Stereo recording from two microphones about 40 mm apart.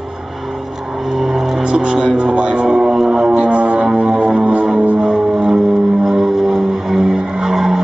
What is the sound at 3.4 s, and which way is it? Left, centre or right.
Music, right.